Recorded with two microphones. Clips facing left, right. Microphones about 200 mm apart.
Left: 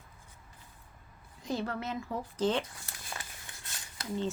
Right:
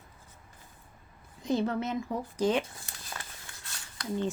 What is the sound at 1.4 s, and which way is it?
Speech, 20° right (ahead or behind).